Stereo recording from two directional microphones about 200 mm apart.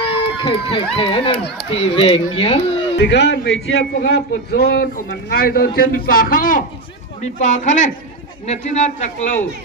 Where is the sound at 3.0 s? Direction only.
60° left (ahead or behind); by 8.9 s 35° left (ahead or behind).